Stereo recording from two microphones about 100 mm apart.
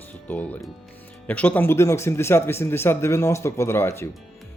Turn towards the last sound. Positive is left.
turn(degrees=25)  # may be behind; listen again after turning